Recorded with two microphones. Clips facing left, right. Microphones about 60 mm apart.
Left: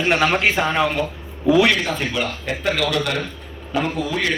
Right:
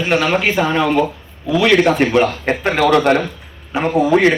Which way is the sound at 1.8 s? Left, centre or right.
Right.